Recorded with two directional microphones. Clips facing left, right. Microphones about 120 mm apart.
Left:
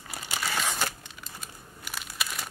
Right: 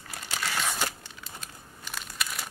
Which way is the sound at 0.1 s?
10° left (ahead or behind).